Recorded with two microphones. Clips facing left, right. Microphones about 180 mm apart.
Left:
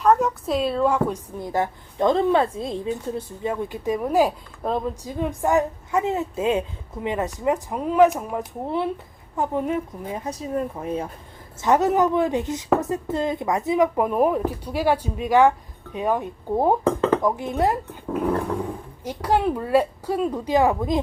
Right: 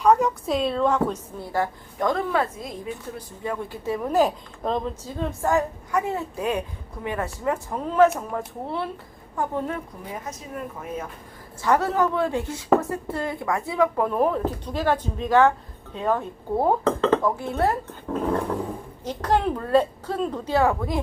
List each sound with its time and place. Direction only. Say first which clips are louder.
0.0 s a woman's voice: even; centre (ahead or behind); by 9.8 s 15° left (ahead or behind)
10.1 s speech: left 6 dB; 35° left (ahead or behind)
11.6 s a woman's voice: left 3 dB; 20° left (ahead or behind)